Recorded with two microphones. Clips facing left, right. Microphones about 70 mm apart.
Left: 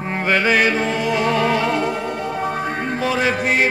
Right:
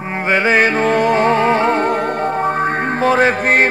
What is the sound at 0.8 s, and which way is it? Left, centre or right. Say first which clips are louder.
Music: right 6 dB; right.